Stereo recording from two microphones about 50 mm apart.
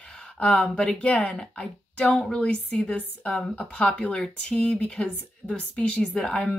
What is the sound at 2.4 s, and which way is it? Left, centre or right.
Speech, left.